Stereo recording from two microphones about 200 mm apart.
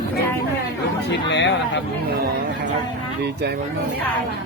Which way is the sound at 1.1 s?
60° left (ahead or behind).